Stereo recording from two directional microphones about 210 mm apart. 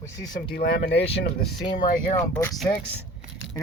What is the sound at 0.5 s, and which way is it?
Speech, 50° left (ahead or behind).